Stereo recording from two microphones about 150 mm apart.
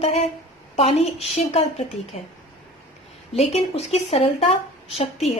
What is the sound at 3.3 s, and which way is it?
A woman's voice, 45° left (ahead or behind).